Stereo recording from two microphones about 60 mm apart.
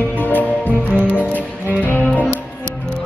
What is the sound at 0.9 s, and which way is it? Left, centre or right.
Music, right.